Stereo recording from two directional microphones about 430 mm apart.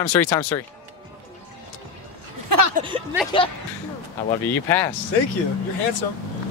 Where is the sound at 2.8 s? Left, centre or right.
Centre.